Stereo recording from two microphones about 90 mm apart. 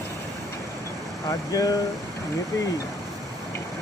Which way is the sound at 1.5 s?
40° left (ahead or behind).